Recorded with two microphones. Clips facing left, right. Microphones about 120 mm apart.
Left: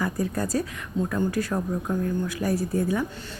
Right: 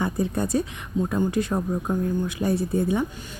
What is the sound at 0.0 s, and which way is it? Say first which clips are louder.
Speech: right 2 dB; 25° right (ahead or behind).